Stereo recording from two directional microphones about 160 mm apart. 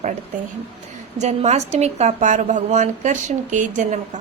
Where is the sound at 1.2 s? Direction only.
45° right (ahead or behind).